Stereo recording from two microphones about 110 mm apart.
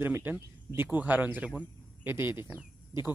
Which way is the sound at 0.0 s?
20° right (ahead or behind).